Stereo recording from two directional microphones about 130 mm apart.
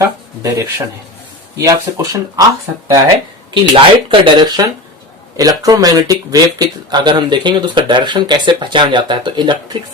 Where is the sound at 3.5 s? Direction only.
40° right (ahead or behind).